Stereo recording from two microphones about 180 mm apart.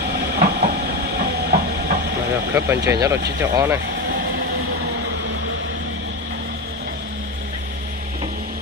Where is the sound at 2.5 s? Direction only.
15° right (ahead or behind).